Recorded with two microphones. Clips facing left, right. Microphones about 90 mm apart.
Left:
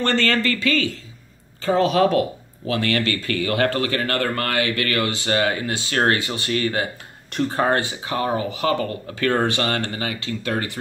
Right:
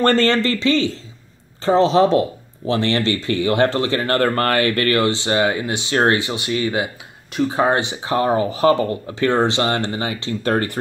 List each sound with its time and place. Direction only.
0.0 s speech: 40° right (ahead or behind)
0.3 s speech: 30° right (ahead or behind)
4.2 s speech: 40° right (ahead or behind)
9.2 s speech: 20° right (ahead or behind)
10.4 s speech: 40° right (ahead or behind)